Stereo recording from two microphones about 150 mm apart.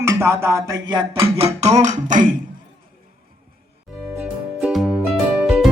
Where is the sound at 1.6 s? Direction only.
50° right (ahead or behind).